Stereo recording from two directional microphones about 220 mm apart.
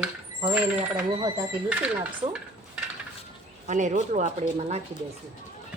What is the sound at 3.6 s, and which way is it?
A woman's voice, 35° right (ahead or behind).